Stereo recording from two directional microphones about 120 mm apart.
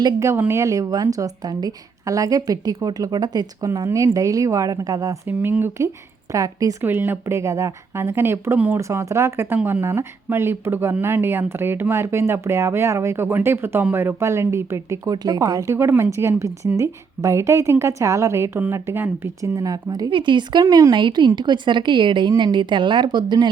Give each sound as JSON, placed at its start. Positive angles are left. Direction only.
{"t": 0.0, "sound": "speech", "side_deg": -25}
{"t": 5.4, "sound": "speech", "side_deg": -15}
{"t": 6.8, "sound": "speech", "side_deg": -15}
{"t": 8.8, "sound": "speech", "side_deg": -25}
{"t": 15.1, "sound": "speech", "side_deg": -35}
{"t": 20.1, "sound": "a woman's voice", "side_deg": -40}